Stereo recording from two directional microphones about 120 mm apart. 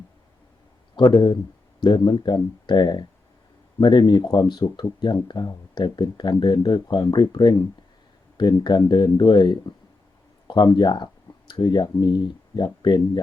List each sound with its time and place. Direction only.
0.9 s speech: 35° left (ahead or behind)